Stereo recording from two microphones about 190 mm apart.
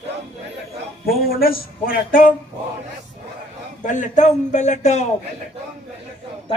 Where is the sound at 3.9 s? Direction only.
40° left (ahead or behind).